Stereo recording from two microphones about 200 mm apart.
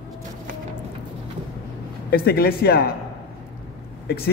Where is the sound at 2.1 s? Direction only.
50° left (ahead or behind).